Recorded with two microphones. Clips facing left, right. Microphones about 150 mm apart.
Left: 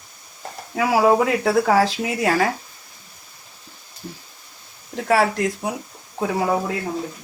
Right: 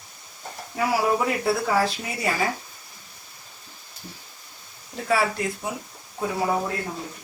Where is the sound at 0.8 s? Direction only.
85° left.